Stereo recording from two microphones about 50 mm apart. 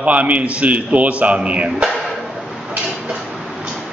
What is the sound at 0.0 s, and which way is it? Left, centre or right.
A man's voice, right.